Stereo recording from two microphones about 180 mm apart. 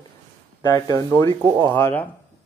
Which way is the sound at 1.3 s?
25° right (ahead or behind).